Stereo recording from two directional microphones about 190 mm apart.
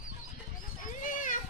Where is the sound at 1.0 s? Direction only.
45° left (ahead or behind).